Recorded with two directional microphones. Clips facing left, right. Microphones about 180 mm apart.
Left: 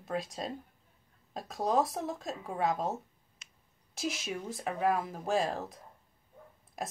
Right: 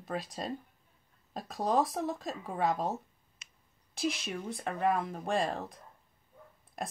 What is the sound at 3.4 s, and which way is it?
Clicking, 20° right (ahead or behind).